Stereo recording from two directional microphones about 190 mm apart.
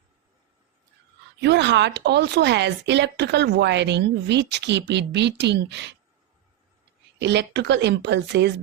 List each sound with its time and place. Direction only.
1.4 s speech: 65° right (ahead or behind)
7.2 s speech: 65° right (ahead or behind)